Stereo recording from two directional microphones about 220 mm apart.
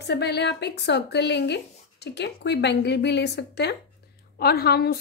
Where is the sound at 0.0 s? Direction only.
50° left (ahead or behind).